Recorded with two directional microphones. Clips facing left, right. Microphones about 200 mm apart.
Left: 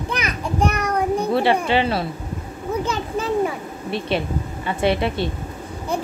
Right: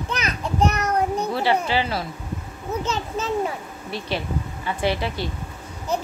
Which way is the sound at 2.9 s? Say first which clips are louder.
Left 2 dB; 10° left (ahead or behind).